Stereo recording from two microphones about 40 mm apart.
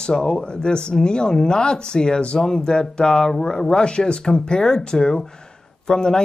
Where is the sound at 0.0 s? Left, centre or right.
Centre.